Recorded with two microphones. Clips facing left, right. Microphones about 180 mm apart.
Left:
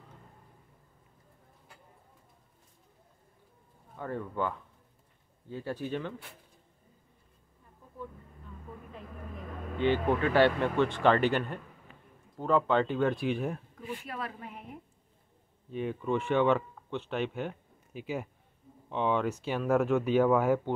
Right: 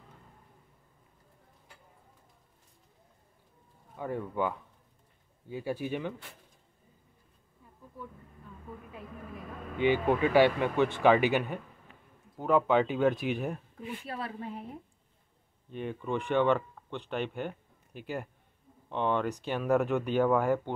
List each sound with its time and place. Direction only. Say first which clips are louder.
3.9 s speech: right 2 dB; 10° right (ahead or behind)
9.8 s speech: right 1 dB; 10° right (ahead or behind)
14.0 s a woman's voice: right 2 dB; 30° right (ahead or behind)
15.7 s speech: left 3 dB; centre (ahead or behind)